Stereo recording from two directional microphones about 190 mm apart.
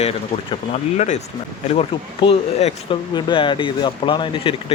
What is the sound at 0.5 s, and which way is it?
Speech, 35° left (ahead or behind).